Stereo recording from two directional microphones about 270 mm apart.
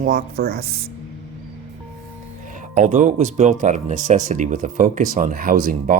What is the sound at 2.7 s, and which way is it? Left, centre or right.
Speech, right.